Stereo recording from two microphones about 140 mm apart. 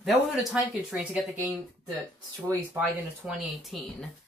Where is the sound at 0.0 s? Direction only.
Centre (ahead or behind).